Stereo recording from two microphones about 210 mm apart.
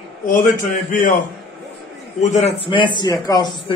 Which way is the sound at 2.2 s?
30° left (ahead or behind).